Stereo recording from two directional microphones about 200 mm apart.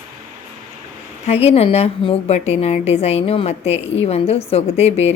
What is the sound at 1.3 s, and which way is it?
A woman's voice, 30° left (ahead or behind).